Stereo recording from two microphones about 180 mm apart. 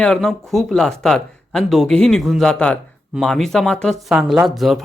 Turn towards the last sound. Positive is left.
turn(degrees=0)  # may be behind; listen again after turning